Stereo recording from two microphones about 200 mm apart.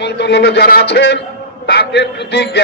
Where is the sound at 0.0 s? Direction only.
55° left (ahead or behind).